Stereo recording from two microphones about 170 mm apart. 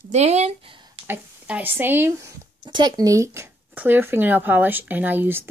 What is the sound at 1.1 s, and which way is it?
Speech, 10° right (ahead or behind).